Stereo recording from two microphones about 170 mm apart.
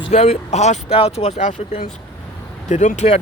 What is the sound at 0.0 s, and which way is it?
Speech, 35° left (ahead or behind).